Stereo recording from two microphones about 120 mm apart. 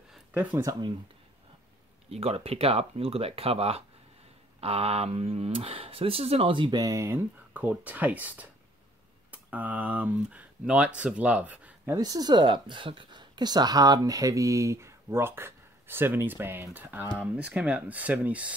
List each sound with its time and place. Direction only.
0.3 s speech: 15° right (ahead or behind)
0.6 s speech: 30° right (ahead or behind)
2.0 s speech: 55° right (ahead or behind)
6.8 s speech: 25° right (ahead or behind)
12.0 s speech: 35° right (ahead or behind); by 18.5 s 10° right (ahead or behind)